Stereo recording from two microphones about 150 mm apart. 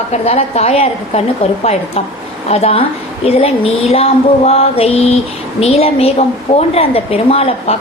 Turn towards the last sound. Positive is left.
turn(degrees=40)  # may be behind; listen again after turning